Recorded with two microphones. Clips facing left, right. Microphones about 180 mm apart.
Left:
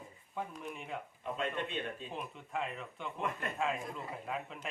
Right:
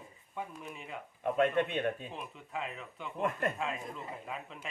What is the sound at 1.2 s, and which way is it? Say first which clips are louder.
Speech: right 10 dB; 60° right (ahead or behind).